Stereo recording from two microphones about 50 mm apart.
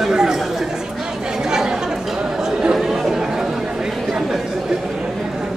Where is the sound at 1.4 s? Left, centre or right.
Centre.